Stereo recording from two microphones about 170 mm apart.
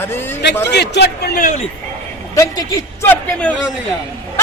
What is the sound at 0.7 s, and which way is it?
Speech, 80° left.